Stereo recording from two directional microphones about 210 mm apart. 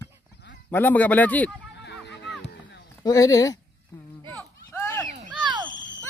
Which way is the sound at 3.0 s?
15° left (ahead or behind).